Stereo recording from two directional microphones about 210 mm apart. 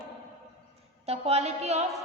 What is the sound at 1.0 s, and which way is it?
Speech, 30° right (ahead or behind).